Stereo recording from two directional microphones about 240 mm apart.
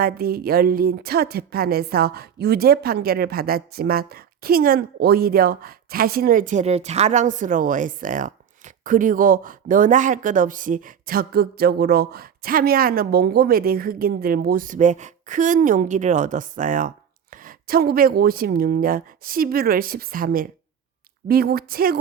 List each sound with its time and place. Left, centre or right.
0.0 s a woman's voice: right